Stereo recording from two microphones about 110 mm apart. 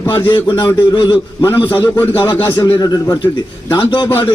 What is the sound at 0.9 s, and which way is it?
Speech, 45° left (ahead or behind).